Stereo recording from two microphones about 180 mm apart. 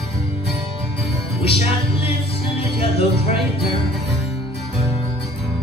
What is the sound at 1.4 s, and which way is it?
Music, 35° left (ahead or behind).